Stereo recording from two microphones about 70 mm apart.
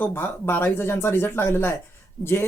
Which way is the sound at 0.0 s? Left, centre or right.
Left.